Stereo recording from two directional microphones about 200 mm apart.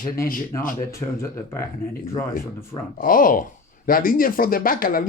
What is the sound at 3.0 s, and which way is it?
Speech, 45° left (ahead or behind).